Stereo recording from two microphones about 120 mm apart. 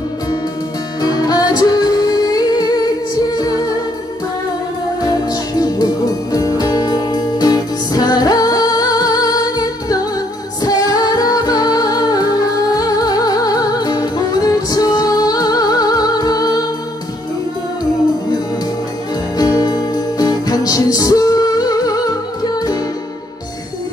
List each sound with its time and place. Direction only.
1.0 s music: 30° left (ahead or behind)
5.0 s music: 30° left (ahead or behind)
19.3 s music: 30° left (ahead or behind)